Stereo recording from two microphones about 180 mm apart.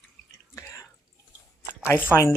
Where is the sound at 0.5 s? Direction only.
15° left (ahead or behind).